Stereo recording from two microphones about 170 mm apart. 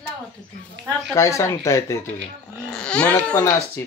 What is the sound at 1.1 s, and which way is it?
Speech, 15° left (ahead or behind).